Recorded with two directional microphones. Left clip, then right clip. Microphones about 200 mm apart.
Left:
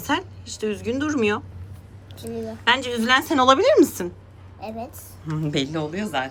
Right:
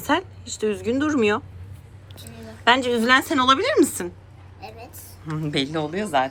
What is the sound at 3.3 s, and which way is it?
Speech, 25° left (ahead or behind).